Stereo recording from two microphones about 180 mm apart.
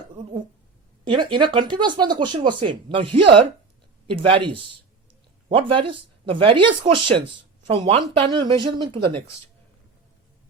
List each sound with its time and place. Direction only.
1.0 s speech: 25° right (ahead or behind)